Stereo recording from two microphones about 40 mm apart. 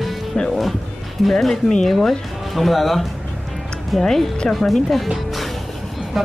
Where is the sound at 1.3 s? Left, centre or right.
Centre.